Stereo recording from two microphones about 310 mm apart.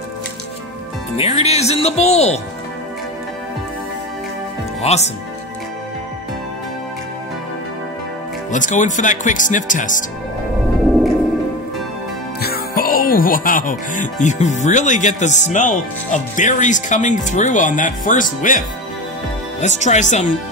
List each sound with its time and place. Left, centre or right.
1.1 s speech: centre
4.8 s speech: left
8.5 s speech: left
12.4 s speech: left
19.6 s speech: left